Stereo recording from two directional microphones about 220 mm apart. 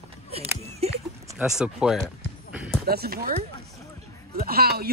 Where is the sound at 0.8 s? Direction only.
30° right (ahead or behind).